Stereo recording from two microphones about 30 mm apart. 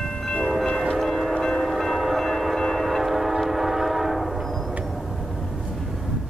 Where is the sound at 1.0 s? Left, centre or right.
Centre.